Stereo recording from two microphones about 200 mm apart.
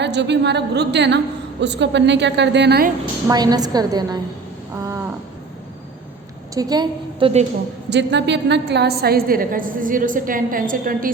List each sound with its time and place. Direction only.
0.0 s a woman's voice: 60° right (ahead or behind)
3.2 s a woman's voice: 20° right (ahead or behind)
4.8 s a sound: 15° right (ahead or behind)
6.5 s a woman's voice: 20° right (ahead or behind)
7.9 s a woman's voice: 60° right (ahead or behind); by 11.1 s 45° right (ahead or behind)